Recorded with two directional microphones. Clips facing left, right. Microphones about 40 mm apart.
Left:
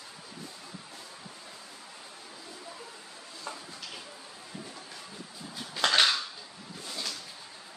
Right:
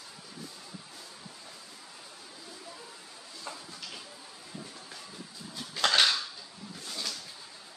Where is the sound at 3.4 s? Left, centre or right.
Centre.